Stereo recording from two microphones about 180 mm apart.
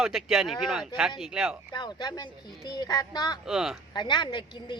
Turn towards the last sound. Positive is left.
turn(degrees=25)  # may be behind; listen again after turning